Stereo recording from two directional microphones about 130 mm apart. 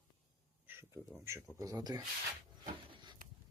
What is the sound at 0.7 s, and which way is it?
Speech, 20° right (ahead or behind).